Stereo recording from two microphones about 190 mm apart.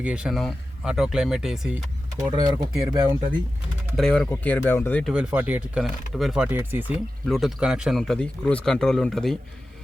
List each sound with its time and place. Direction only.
0.0 s speech: 5° right (ahead or behind)
2.3 s speech: 20° right (ahead or behind)
3.9 s speech: 5° left (ahead or behind)
5.1 s speech: 5° right (ahead or behind)